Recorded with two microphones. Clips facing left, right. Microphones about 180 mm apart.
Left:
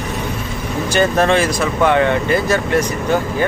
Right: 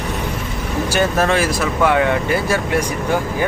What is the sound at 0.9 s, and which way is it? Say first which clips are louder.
Speech: left 3 dB; 5° right (ahead or behind).